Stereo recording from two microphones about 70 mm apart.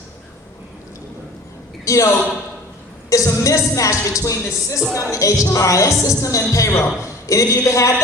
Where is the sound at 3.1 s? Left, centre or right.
Left.